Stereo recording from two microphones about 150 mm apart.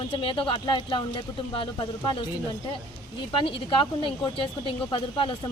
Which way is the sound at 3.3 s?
35° left (ahead or behind).